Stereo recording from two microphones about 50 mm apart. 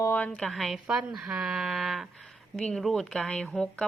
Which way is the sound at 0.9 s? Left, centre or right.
Centre.